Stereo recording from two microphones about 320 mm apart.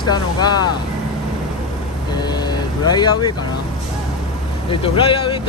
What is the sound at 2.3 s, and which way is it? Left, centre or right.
Speech, centre.